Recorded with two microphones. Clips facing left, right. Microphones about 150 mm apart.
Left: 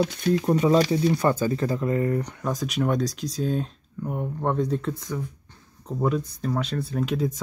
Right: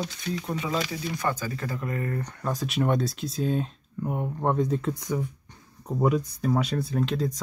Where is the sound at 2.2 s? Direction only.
10° left (ahead or behind).